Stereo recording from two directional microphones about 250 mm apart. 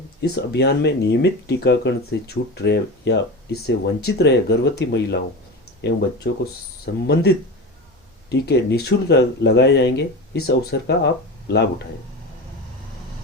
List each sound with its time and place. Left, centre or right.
0.2 s speech: left
8.3 s speech: left